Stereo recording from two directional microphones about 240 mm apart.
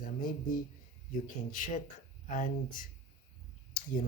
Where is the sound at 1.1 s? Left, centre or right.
Left.